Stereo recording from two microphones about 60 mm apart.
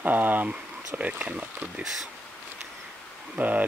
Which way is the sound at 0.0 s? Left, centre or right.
Right.